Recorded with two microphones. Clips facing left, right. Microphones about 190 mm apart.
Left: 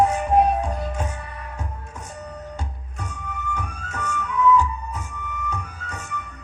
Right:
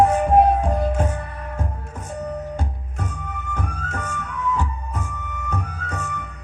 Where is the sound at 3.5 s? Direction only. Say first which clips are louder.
Right 3 dB; 50° right (ahead or behind).